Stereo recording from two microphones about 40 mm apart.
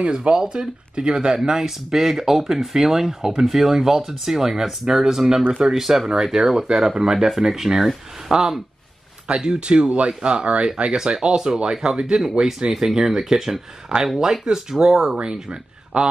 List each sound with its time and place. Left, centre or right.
0.1 s speech: right
1.6 s speech: centre; by 10.7 s right
11.0 s speech: centre
15.9 s a man's voice: right